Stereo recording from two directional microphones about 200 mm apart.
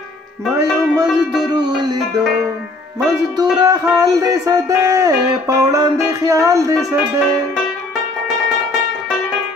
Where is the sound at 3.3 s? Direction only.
20° right (ahead or behind).